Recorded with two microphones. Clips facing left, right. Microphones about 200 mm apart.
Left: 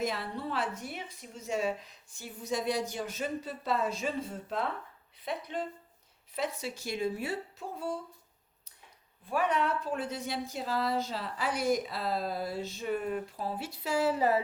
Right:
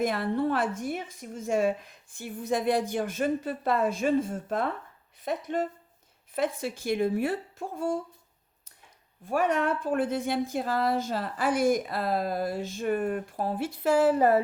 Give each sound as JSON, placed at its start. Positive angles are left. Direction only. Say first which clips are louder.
{"t": 0.0, "sound": "a woman's voice", "louder": "right 8 dB", "side_deg": -55}
{"t": 9.2, "sound": "a woman's voice", "louder": "right 4 dB", "side_deg": -45}